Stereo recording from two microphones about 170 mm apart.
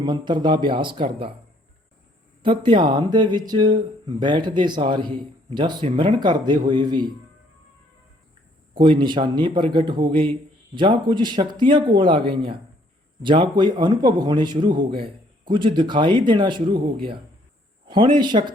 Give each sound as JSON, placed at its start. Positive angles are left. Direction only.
{"t": 0.0, "sound": "speech", "side_deg": -25}
{"t": 2.4, "sound": "speech", "side_deg": -30}
{"t": 8.7, "sound": "speech", "side_deg": -30}